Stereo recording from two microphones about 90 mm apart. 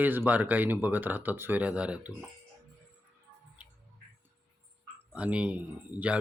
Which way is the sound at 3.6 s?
15° right (ahead or behind).